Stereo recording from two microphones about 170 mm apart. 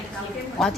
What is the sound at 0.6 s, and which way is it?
Speech, centre (ahead or behind).